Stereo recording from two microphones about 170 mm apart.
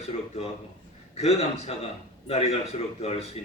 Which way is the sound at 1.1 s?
35° left (ahead or behind).